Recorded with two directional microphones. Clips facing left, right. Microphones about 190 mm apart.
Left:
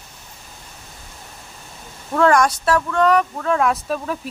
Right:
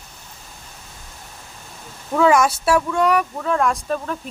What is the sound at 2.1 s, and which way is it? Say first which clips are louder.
Speech: even; 5° right (ahead or behind).